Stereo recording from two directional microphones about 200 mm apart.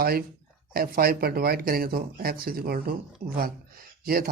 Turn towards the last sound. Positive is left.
turn(degrees=-45)  # may be behind; listen again after turning